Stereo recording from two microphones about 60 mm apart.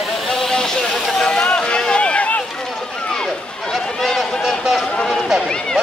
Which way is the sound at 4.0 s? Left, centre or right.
Centre.